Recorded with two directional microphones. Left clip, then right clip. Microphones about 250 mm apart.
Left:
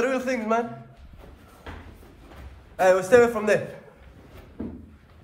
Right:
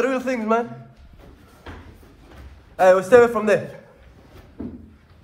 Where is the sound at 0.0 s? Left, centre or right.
Centre.